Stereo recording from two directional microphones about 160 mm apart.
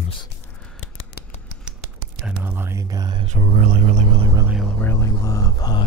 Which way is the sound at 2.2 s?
15° right (ahead or behind).